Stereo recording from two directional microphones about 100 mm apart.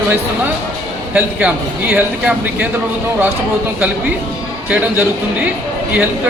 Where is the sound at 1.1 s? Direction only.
20° right (ahead or behind).